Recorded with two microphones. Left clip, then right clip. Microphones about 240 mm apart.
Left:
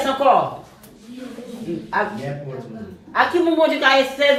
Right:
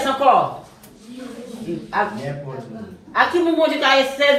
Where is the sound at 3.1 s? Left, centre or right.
Left.